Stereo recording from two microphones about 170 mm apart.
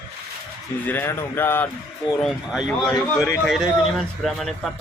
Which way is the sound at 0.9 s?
10° left (ahead or behind).